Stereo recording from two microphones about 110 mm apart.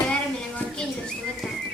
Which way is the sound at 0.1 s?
5° left (ahead or behind).